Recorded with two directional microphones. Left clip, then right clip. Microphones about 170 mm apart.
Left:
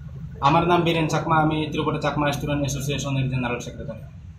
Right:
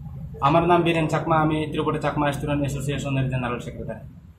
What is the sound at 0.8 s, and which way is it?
A man's voice, 5° right (ahead or behind).